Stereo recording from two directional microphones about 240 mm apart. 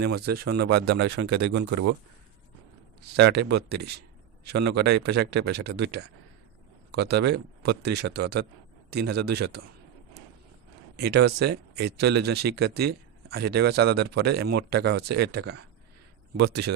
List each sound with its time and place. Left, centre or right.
0.0 s speech: right
0.5 s speech: right
3.2 s speech: right
10.9 s a man's voice: right